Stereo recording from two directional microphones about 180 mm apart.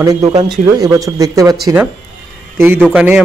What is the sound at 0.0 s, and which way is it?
A man's voice, 20° right (ahead or behind).